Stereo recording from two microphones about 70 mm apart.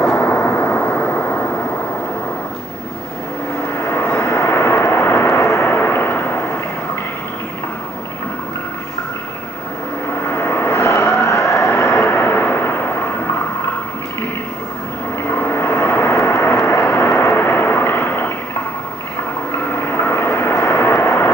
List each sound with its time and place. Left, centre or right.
0.0 s vehicle: left
1.2 s vehicle: left
3.7 s vehicle: left
5.8 s vehicle: left
10.2 s vehicle: left
15.3 s vehicle: left
19.8 s vehicle: left